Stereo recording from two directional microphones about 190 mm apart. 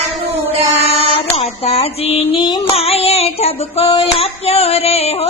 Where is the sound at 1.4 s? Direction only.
30° left (ahead or behind).